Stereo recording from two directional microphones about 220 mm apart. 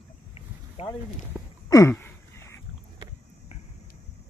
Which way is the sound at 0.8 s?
25° left (ahead or behind).